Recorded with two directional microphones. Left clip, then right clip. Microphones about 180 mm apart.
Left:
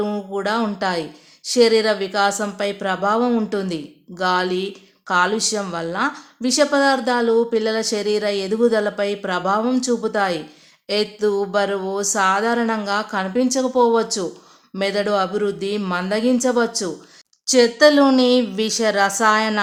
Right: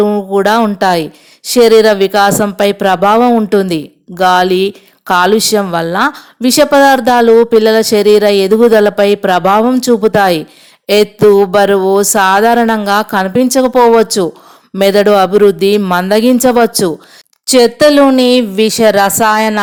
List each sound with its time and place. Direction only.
0.0 s speech: 40° right (ahead or behind)
3.2 s speech: 35° right (ahead or behind)